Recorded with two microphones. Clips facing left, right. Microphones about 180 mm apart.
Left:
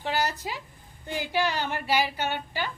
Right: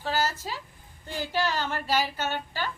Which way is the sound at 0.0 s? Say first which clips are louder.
Even; 15° left (ahead or behind).